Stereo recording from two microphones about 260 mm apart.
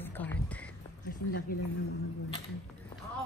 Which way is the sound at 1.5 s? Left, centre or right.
Left.